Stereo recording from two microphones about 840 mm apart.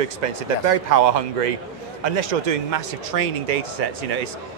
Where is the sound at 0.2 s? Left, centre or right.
Right.